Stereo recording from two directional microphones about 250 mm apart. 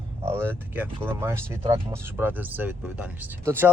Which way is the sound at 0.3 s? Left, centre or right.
Centre.